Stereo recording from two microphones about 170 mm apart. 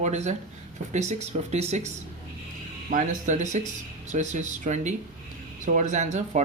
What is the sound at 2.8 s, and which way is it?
Speech, 50° right (ahead or behind).